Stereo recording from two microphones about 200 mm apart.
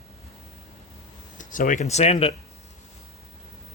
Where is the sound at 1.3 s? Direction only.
40° left (ahead or behind).